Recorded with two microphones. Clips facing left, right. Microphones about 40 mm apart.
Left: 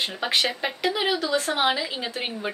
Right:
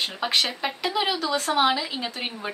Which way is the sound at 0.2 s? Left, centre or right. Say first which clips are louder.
Even; centre.